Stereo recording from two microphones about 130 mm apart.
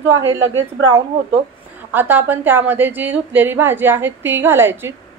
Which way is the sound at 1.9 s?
15° right (ahead or behind).